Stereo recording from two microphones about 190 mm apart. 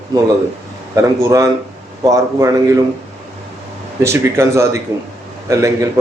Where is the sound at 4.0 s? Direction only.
15° right (ahead or behind).